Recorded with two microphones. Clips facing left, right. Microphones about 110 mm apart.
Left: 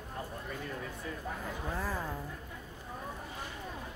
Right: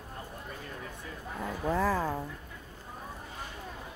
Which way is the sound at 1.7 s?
85° right.